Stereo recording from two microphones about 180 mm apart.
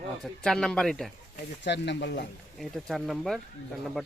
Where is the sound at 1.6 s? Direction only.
70° left (ahead or behind).